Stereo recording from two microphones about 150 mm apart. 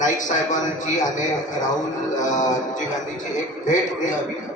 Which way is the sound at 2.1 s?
55° left (ahead or behind).